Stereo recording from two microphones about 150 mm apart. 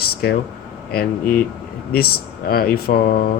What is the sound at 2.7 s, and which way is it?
Speech, 90° left.